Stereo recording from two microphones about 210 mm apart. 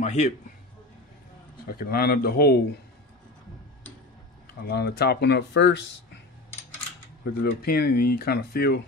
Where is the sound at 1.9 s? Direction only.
45° left (ahead or behind).